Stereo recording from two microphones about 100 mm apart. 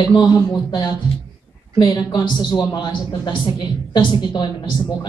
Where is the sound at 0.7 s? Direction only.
50° left (ahead or behind).